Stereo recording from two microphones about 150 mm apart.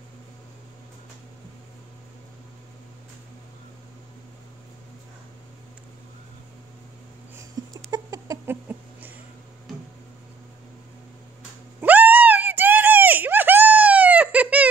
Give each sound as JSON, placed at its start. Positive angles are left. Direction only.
{"t": 7.6, "sound": "a sound", "side_deg": -25}
{"t": 8.5, "sound": "chicken", "side_deg": -10}
{"t": 11.8, "sound": "screaming", "side_deg": -10}